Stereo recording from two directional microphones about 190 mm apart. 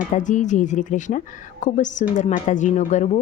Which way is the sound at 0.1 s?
40° left (ahead or behind).